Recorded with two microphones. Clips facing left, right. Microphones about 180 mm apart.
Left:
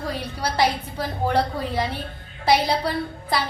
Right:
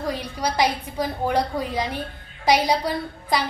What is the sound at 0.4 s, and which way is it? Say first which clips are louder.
A woman's voice: even; 15° right (ahead or behind).